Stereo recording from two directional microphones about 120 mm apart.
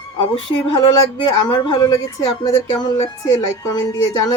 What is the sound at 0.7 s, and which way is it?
Speech, 35° left (ahead or behind).